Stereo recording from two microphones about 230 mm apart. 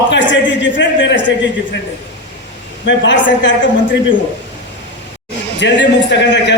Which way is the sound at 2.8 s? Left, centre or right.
Left.